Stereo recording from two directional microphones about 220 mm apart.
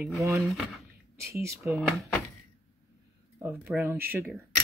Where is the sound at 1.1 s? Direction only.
15° right (ahead or behind).